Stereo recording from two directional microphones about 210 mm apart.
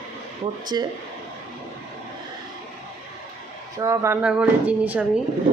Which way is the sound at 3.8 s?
15° right (ahead or behind).